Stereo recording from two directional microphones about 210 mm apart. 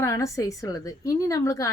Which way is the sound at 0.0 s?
15° left (ahead or behind).